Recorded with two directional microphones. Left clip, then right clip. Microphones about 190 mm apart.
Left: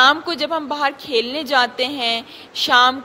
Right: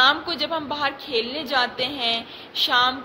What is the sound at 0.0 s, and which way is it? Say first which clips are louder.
A woman's voice: left 4 dB; 50° left (ahead or behind).